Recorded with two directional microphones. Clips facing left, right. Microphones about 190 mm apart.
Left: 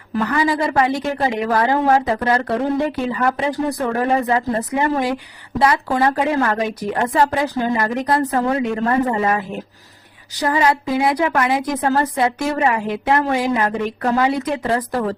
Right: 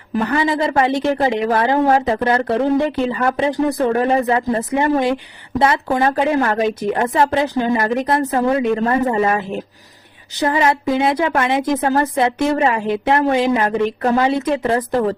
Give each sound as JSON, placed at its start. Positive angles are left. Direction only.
{"t": 0.3, "sound": "speech", "side_deg": -25}